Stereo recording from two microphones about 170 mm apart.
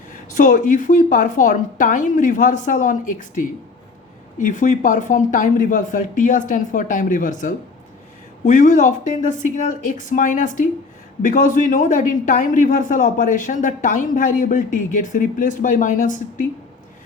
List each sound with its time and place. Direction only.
0.3 s speech: 50° left (ahead or behind)